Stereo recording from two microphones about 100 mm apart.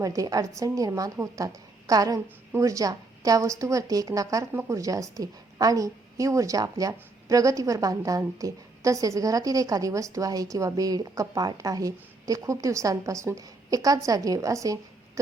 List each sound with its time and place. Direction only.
0.0 s a woman's voice: 35° right (ahead or behind)